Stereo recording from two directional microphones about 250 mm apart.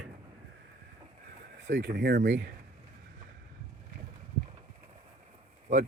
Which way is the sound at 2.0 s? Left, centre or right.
Right.